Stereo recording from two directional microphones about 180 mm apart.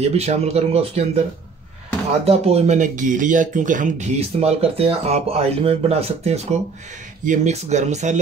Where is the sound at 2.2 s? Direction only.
35° right (ahead or behind).